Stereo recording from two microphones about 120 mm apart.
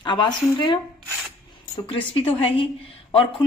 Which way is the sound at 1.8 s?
50° left (ahead or behind).